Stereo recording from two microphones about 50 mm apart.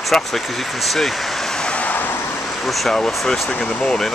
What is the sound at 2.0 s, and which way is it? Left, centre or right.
Vehicle, left.